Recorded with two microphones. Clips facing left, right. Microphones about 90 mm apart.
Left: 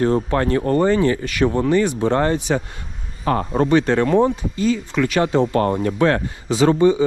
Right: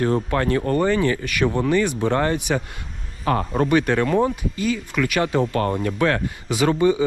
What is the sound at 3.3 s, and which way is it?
Speech, 35° left (ahead or behind).